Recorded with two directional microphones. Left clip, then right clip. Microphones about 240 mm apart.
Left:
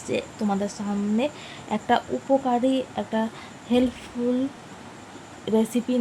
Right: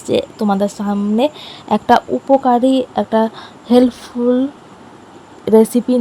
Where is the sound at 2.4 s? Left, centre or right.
Right.